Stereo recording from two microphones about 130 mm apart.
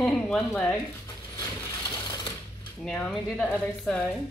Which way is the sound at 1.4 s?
30° left (ahead or behind).